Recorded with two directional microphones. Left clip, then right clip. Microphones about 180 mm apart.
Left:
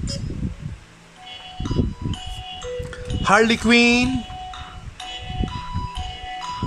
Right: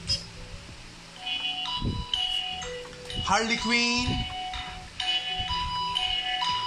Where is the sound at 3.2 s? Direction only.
80° left.